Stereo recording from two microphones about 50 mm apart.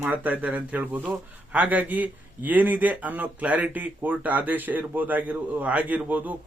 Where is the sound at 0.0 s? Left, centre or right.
Right.